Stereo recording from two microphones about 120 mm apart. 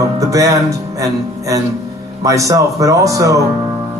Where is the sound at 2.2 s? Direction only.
30° right (ahead or behind).